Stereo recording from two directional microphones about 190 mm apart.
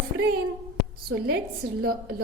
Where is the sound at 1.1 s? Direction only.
90° right.